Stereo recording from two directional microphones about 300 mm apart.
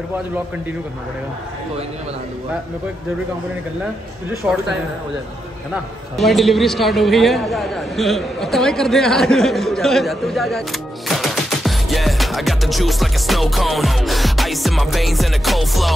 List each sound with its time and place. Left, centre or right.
4.3 s a man's voice: centre
6.1 s a man's voice: centre
11.1 s music: centre